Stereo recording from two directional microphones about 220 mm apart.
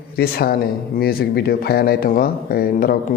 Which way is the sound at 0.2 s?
45° left (ahead or behind).